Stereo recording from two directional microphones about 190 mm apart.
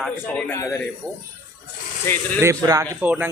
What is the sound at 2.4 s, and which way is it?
Speech, 15° right (ahead or behind).